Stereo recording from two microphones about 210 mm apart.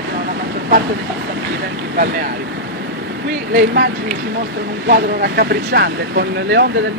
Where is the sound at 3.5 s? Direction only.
50° right (ahead or behind).